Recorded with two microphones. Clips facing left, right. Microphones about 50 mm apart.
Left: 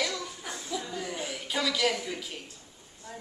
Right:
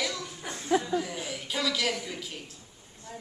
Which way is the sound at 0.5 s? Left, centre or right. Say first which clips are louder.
Right 10 dB; right.